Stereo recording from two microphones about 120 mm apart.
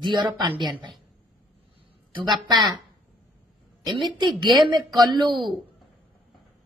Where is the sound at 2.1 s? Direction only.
35° right (ahead or behind).